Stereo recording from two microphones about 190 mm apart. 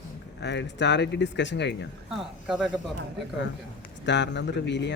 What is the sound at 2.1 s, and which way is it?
Speech, 5° right (ahead or behind).